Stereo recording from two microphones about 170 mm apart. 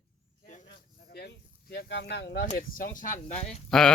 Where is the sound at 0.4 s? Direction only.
45° left (ahead or behind).